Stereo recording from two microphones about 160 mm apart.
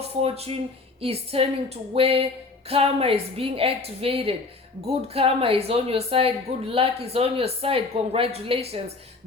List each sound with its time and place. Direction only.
0.2 s speech: 40° right (ahead or behind)